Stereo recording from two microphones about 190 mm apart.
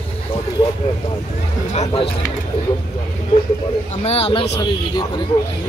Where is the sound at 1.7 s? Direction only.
35° left (ahead or behind).